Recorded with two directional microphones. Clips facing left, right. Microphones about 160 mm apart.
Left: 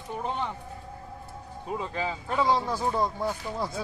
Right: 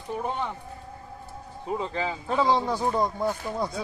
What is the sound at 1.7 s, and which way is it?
Speech, 20° right (ahead or behind).